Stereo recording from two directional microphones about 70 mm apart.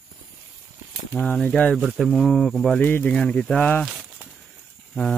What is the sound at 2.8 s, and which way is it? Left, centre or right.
Speech, left.